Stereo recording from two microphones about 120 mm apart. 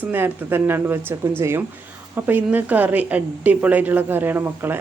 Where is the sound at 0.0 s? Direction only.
15° right (ahead or behind).